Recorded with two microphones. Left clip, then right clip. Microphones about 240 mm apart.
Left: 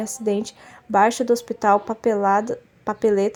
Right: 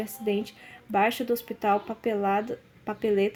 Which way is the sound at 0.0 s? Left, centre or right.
Left.